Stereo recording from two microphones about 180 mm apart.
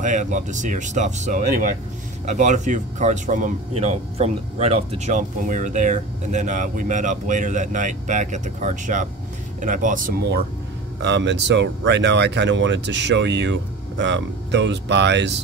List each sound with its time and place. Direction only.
0.0 s speech: 45° right (ahead or behind)
11.0 s speech: 80° right